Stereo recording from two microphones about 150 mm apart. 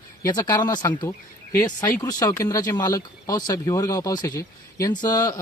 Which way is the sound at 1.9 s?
25° left (ahead or behind).